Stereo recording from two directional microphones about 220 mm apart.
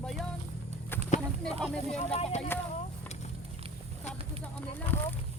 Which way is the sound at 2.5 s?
10° left (ahead or behind).